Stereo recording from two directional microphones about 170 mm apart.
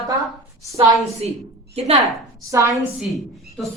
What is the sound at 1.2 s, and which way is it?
Speech, 40° right (ahead or behind).